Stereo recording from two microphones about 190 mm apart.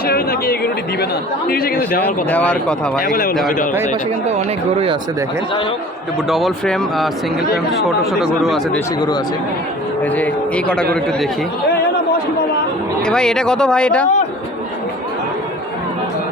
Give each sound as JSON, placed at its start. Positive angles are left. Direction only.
{"t": 0.1, "sound": "speech", "side_deg": 55}
{"t": 2.0, "sound": "speech", "side_deg": 10}
{"t": 3.0, "sound": "speech", "side_deg": 50}
{"t": 6.2, "sound": "speech", "side_deg": 0}
{"t": 10.2, "sound": "speech", "side_deg": 5}
{"t": 13.1, "sound": "speech", "side_deg": 5}